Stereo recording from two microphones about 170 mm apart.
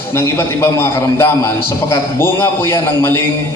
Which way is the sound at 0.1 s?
15° left (ahead or behind).